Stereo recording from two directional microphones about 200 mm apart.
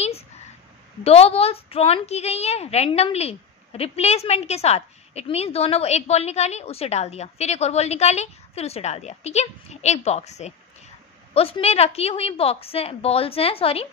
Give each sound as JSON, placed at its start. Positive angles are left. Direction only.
{"t": 1.0, "sound": "a woman's voice", "side_deg": 30}